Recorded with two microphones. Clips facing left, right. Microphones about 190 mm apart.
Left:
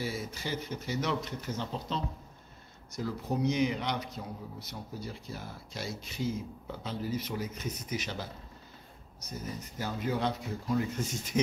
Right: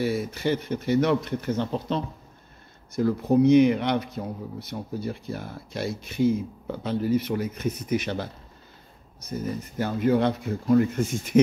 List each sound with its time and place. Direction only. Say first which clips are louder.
0.0 s speech: right 11 dB; 60° right (ahead or behind)